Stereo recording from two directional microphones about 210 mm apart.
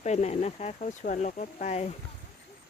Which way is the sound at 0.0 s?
30° left (ahead or behind).